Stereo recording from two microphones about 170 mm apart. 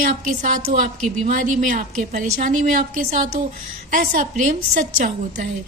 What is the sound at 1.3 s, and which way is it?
A woman's voice, 50° right (ahead or behind).